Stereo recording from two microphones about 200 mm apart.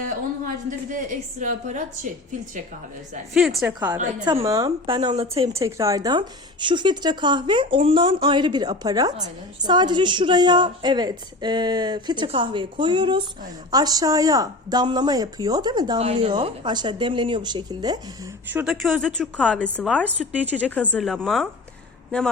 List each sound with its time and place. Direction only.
0.0 s a woman's voice: 40° right (ahead or behind)
3.3 s a woman's voice: centre (ahead or behind)
3.7 s a woman's voice: 15° right (ahead or behind); by 5.5 s 30° right (ahead or behind)
5.5 s a woman's voice: 15° right (ahead or behind); by 16.3 s 35° right (ahead or behind)
16.3 s a woman's voice: 20° right (ahead or behind)
18.4 s a woman's voice: 5° right (ahead or behind)
20.1 s speech: 10° right (ahead or behind)
20.6 s a woman's voice: 5° left (ahead or behind)